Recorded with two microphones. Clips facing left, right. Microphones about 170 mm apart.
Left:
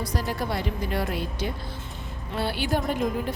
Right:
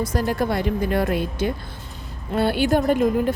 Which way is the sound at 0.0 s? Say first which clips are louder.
Right 7 dB; 50° right (ahead or behind).